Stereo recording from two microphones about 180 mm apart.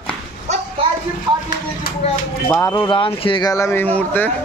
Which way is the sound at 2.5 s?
15° left (ahead or behind).